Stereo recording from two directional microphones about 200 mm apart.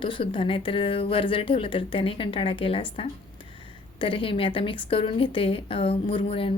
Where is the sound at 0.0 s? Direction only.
25° left (ahead or behind).